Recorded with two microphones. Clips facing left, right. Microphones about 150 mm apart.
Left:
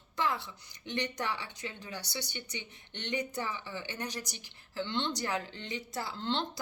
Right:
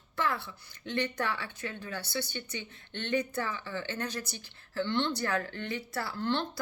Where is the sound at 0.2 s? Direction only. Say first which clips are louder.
Right 1 dB; 15° left (ahead or behind).